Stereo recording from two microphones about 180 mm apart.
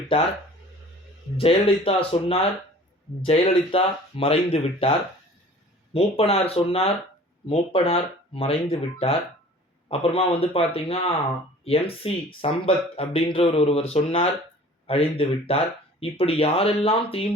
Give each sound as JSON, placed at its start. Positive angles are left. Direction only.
{"t": 0.1, "sound": "speech", "side_deg": 30}
{"t": 1.4, "sound": "speech", "side_deg": 30}